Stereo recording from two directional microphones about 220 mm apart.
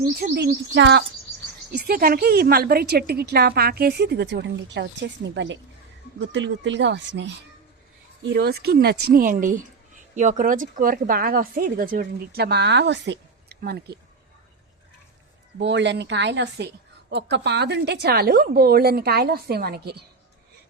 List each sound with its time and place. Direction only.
0.3 s a woman's voice: 45° right (ahead or behind)
8.2 s a woman's voice: 45° right (ahead or behind)
15.5 s a woman's voice: 55° right (ahead or behind)